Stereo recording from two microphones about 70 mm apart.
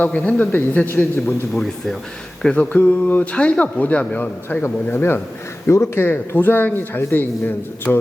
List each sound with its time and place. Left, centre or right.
0.0 s speech: left
1.5 s speech: centre
2.6 s speech: left
5.6 s speech: left